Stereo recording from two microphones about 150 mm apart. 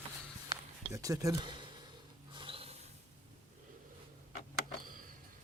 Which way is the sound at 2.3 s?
35° right (ahead or behind).